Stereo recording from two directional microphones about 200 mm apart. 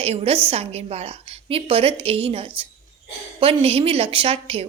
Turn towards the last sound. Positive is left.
turn(degrees=-30)  # may be behind; listen again after turning